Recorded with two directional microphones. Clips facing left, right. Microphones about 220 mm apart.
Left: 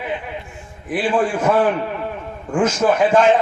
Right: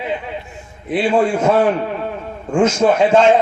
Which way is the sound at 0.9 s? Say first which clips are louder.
Right 3 dB; 25° right (ahead or behind).